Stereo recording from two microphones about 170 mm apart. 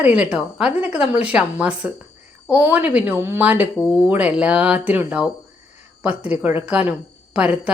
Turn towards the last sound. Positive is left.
turn(degrees=-5)  # may be behind; listen again after turning